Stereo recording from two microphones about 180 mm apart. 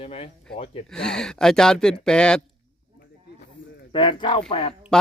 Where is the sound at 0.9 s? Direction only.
5° left (ahead or behind).